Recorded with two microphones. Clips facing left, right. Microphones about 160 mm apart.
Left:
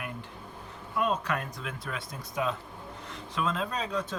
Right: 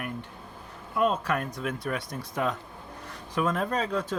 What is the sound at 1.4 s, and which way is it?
Speech, 45° right (ahead or behind).